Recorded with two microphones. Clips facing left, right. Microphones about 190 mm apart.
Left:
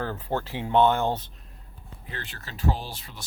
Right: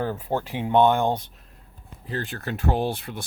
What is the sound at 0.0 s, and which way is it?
Speech, 15° right (ahead or behind).